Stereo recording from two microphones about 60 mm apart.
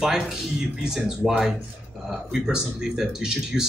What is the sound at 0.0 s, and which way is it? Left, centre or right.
Speech, centre.